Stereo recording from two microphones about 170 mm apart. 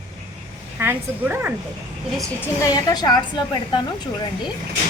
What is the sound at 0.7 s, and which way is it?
Speech, 10° right (ahead or behind).